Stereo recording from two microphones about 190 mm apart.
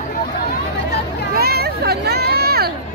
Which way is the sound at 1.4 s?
55° right (ahead or behind).